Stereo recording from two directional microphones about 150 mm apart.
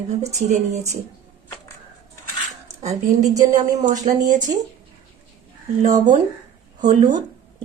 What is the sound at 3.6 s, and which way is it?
Speech, 50° right (ahead or behind).